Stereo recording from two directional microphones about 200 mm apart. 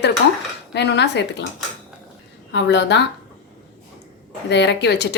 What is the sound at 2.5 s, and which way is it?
Speech, 60° left (ahead or behind).